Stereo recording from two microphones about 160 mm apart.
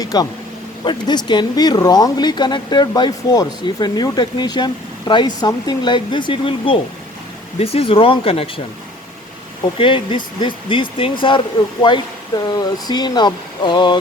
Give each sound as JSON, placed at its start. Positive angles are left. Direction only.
{"t": 0.0, "sound": "speech", "side_deg": 25}
{"t": 9.7, "sound": "speech", "side_deg": 30}